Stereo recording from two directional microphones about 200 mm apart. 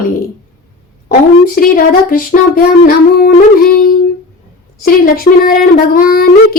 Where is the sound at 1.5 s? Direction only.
45° left (ahead or behind).